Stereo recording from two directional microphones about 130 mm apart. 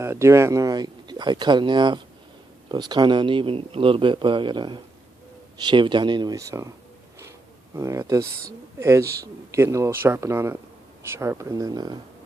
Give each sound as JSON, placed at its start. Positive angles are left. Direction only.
{"t": 0.0, "sound": "speech", "side_deg": -20}
{"t": 7.8, "sound": "speech", "side_deg": -25}